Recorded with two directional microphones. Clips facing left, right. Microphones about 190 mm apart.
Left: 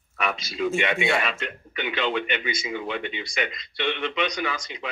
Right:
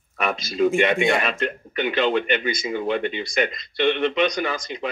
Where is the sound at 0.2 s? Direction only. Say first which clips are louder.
Right 6 dB; 45° right (ahead or behind).